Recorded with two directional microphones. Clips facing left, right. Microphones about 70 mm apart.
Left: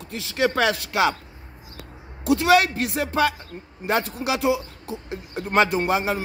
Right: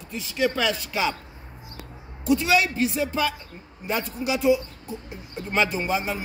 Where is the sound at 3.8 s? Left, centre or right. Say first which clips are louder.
Left 4 dB; left.